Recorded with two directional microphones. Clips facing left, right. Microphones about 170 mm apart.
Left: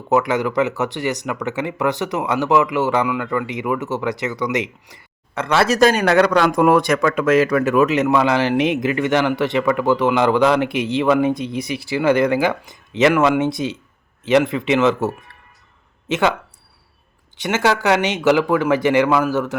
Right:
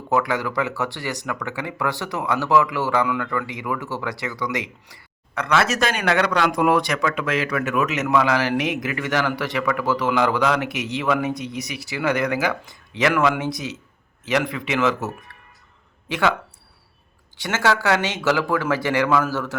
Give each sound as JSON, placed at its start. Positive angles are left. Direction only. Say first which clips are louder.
{"t": 0.1, "sound": "speech", "louder": "left 4 dB", "side_deg": 20}
{"t": 17.3, "sound": "speech", "louder": "left 3 dB", "side_deg": 20}